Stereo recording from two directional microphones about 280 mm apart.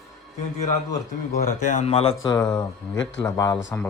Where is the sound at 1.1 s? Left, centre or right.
Left.